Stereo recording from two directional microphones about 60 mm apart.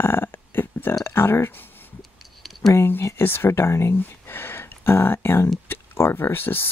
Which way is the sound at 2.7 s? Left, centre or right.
Left.